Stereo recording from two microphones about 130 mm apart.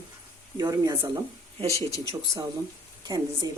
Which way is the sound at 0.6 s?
30° right (ahead or behind).